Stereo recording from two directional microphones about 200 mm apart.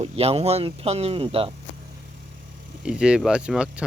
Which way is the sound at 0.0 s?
30° right (ahead or behind).